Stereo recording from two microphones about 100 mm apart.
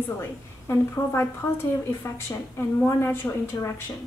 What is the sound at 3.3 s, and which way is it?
Speech, 25° left (ahead or behind).